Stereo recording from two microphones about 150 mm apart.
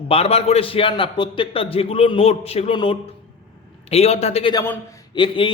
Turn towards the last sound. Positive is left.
turn(degrees=35)  # may be behind; listen again after turning